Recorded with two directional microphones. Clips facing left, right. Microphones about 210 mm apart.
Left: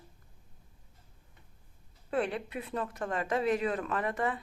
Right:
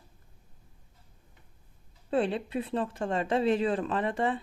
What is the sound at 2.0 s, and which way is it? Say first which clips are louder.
Speech: right 4 dB; 30° right (ahead or behind).